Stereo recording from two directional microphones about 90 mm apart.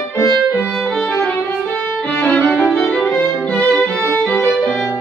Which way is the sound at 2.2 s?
15° left (ahead or behind).